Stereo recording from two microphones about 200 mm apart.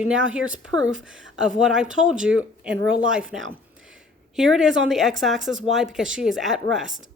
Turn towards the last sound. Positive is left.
turn(degrees=0)  # may be behind; listen again after turning